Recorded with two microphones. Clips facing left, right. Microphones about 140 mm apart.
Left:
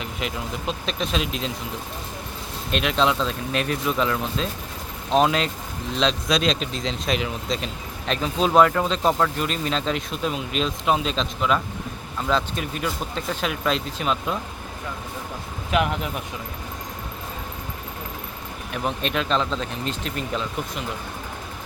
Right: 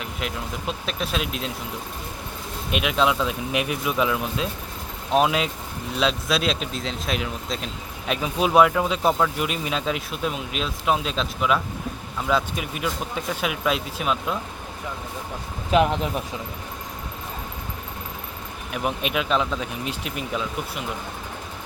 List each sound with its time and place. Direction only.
0.0 s speech: centre (ahead or behind)
2.7 s speech: 10° right (ahead or behind)
15.7 s speech: 30° right (ahead or behind)
18.7 s speech: 10° right (ahead or behind)